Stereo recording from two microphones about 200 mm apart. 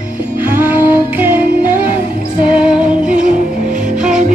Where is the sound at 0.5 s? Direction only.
10° right (ahead or behind).